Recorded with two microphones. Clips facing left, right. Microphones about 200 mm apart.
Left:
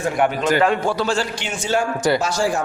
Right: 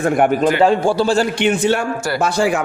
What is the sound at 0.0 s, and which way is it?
Speech, 55° right (ahead or behind).